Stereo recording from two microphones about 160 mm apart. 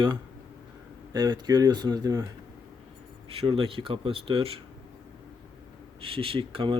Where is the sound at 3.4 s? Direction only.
35° right (ahead or behind).